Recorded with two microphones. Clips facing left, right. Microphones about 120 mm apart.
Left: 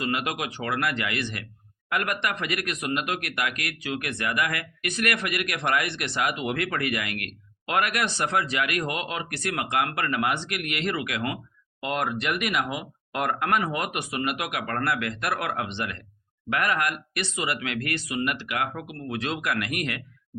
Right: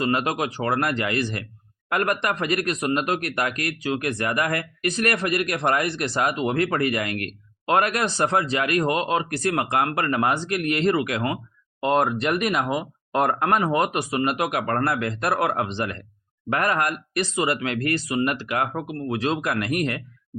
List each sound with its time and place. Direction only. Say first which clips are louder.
0.0 s speech: right 5 dB; 35° right (ahead or behind)